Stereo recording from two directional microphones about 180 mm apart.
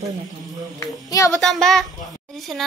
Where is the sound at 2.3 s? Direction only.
Centre (ahead or behind).